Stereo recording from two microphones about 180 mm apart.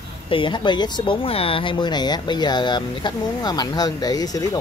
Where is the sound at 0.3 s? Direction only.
25° left (ahead or behind).